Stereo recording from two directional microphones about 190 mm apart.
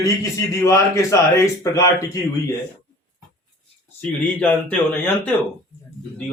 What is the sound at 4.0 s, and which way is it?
A man's voice, 5° left (ahead or behind).